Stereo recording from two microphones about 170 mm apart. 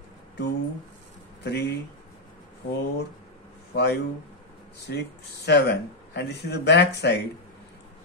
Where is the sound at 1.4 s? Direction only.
80° left.